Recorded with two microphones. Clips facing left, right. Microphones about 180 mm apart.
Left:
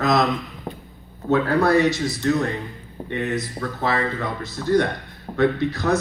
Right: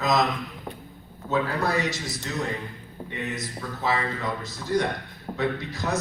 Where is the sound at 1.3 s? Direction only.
60° left (ahead or behind).